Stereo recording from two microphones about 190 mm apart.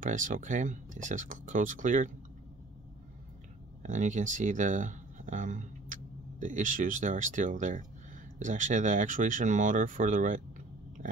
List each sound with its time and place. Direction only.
0.0 s speech: 40° right (ahead or behind)
3.8 s speech: 40° right (ahead or behind)